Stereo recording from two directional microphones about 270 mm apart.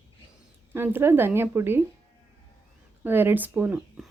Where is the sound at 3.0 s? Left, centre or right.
Centre.